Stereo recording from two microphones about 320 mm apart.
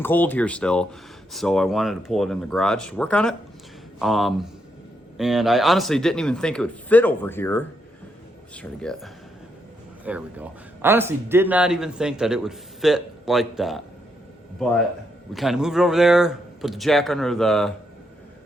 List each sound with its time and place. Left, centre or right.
0.0 s a man's voice: centre
15.3 s a man's voice: centre